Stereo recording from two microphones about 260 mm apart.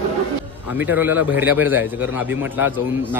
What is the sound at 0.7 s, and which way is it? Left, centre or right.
Speech, centre.